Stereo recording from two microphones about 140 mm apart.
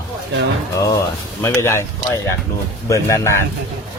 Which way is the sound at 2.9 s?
20° left (ahead or behind).